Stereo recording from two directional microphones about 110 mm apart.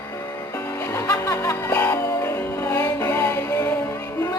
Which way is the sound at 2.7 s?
35° left (ahead or behind).